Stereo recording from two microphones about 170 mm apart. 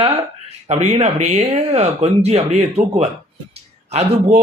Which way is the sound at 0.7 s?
40° right (ahead or behind).